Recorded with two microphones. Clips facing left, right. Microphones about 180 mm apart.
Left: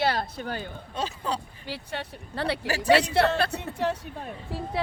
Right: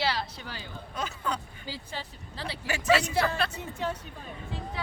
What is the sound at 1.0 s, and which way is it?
Speech, 30° left (ahead or behind).